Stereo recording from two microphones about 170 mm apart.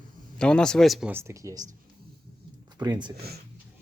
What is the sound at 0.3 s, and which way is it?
Speech, 5° left (ahead or behind).